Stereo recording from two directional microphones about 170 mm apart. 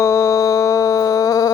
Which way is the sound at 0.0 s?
15° left (ahead or behind).